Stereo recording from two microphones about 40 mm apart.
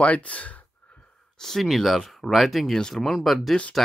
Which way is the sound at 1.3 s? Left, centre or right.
Centre.